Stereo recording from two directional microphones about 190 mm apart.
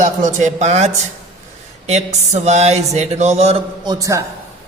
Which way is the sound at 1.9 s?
35° right (ahead or behind).